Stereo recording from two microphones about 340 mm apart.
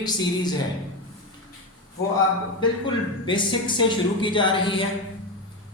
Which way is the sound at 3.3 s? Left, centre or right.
Centre.